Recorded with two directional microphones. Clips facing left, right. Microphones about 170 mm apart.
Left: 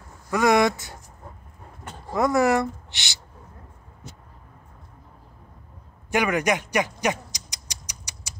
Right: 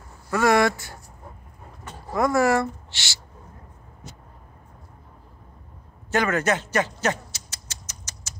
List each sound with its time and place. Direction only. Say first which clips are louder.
0.3 s speech: even; 15° left (ahead or behind)
2.1 s speech: even; 20° left (ahead or behind)
6.1 s rodents: even; 15° left (ahead or behind)